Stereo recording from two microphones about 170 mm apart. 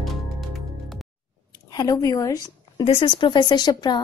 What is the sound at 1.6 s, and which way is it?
A woman's voice, 20° left (ahead or behind).